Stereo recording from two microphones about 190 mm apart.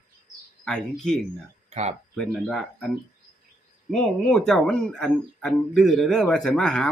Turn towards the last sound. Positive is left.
turn(degrees=5)  # may be behind; listen again after turning